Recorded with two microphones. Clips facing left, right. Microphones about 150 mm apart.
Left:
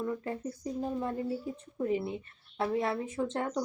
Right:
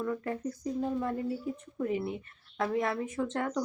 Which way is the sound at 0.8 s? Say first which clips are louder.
Right 1 dB; 25° left (ahead or behind).